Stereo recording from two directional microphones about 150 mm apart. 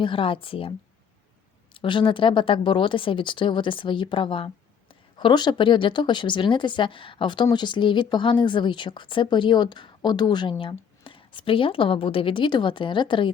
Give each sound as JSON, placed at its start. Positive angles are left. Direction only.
{"t": 0.0, "sound": "a woman's voice", "side_deg": 35}
{"t": 1.7, "sound": "a woman's voice", "side_deg": 35}